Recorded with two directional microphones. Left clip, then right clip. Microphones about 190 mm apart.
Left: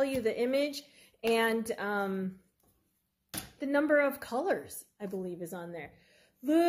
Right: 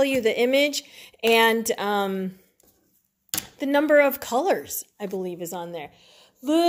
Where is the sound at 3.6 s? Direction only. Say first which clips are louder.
Right 9 dB; 35° right (ahead or behind).